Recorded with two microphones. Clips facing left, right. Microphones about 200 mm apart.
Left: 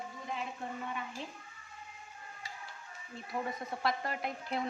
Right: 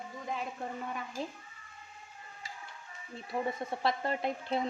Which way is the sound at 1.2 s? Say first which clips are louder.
Right 6 dB; 40° right (ahead or behind).